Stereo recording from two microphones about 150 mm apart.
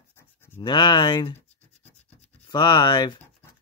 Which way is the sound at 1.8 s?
45° left (ahead or behind).